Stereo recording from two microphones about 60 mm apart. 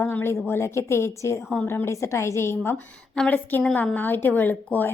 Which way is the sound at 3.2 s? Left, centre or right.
Centre.